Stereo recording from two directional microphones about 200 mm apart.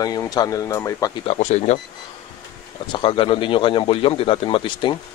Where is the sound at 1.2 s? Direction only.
35° left (ahead or behind).